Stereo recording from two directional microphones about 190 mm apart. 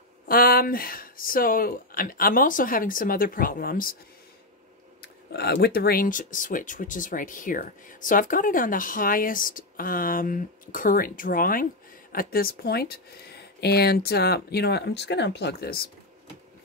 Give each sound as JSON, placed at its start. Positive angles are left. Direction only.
{"t": 0.3, "sound": "speech", "side_deg": 50}
{"t": 5.0, "sound": "speech", "side_deg": 55}